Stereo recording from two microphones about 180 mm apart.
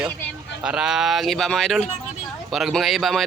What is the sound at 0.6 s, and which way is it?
Speech, 5° right (ahead or behind).